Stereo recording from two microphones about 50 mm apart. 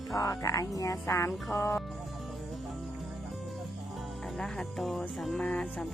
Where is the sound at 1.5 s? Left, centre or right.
Left.